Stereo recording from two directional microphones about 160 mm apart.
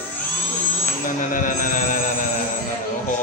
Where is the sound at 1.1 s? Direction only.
55° left (ahead or behind).